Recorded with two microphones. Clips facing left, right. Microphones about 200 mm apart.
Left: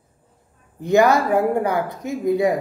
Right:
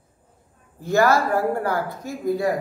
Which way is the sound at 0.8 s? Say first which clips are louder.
Left 3 dB; 20° left (ahead or behind).